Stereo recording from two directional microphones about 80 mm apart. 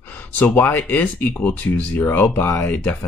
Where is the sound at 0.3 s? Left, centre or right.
Left.